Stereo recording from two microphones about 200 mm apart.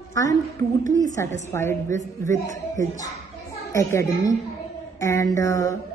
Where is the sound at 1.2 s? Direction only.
10° left (ahead or behind).